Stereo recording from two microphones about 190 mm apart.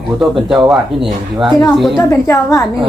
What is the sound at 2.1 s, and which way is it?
Speech, 15° left (ahead or behind).